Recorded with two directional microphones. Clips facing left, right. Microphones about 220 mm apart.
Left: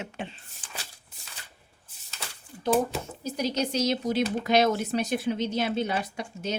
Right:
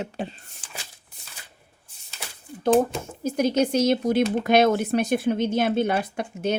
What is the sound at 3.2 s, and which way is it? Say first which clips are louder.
Speech: right 7 dB; 50° right (ahead or behind).